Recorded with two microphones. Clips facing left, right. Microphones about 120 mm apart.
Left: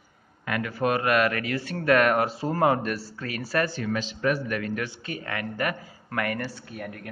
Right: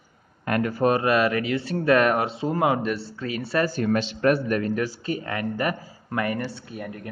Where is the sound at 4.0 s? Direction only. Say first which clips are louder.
Right 5 dB; 65° right (ahead or behind).